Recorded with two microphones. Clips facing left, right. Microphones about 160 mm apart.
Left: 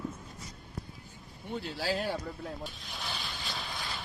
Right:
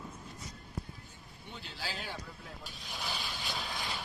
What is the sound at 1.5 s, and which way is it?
Speech, 45° left (ahead or behind).